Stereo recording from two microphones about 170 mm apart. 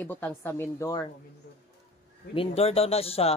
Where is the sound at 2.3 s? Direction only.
35° left (ahead or behind).